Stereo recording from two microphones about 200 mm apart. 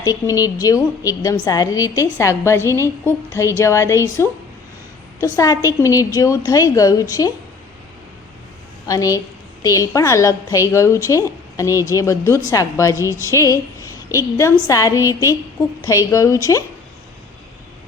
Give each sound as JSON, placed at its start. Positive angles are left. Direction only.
{"t": 0.0, "sound": "a woman's voice", "side_deg": 20}
{"t": 8.9, "sound": "a woman's voice", "side_deg": 15}